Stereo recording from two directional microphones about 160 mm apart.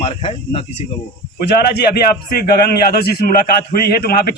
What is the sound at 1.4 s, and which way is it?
Speech, 90° left.